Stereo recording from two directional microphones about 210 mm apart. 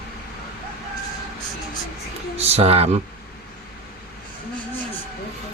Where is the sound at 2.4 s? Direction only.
30° right (ahead or behind).